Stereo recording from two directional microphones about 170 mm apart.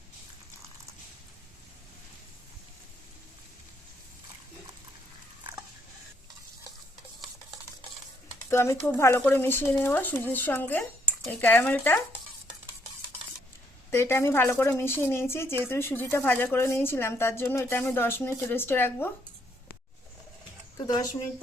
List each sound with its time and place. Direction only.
8.4 s a woman's voice: 15° left (ahead or behind)
13.9 s a woman's voice: 15° left (ahead or behind)
20.7 s speech: 20° left (ahead or behind)